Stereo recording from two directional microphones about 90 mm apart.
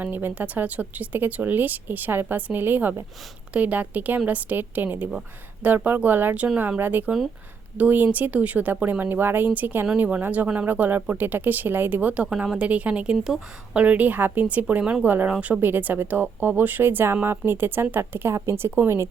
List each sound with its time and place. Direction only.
0.0 s a woman's voice: 20° right (ahead or behind); by 13.4 s 5° right (ahead or behind)
13.7 s speech: 15° right (ahead or behind)